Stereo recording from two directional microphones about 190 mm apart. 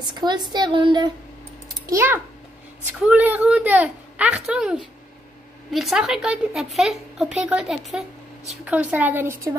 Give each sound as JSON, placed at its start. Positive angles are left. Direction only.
{"t": 0.0, "sound": "a woman's voice", "side_deg": -20}
{"t": 1.9, "sound": "a woman's voice", "side_deg": -10}